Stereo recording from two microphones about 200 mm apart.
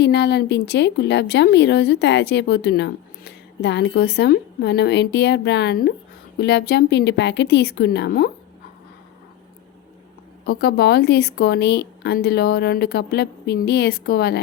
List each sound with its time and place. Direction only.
0.0 s a woman's voice: 55° left (ahead or behind)
10.4 s a woman's voice: 50° left (ahead or behind)